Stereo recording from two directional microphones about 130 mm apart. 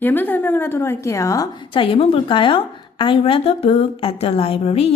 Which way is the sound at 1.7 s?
45° left (ahead or behind).